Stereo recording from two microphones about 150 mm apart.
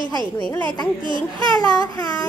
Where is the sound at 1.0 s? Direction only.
30° right (ahead or behind).